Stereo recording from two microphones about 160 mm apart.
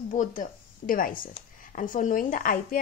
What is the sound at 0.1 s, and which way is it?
A woman's voice, 55° left (ahead or behind).